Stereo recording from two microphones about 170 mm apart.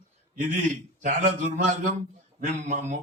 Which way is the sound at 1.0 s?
50° right (ahead or behind).